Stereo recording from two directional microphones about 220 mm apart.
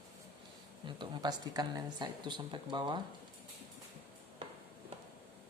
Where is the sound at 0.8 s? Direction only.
20° right (ahead or behind).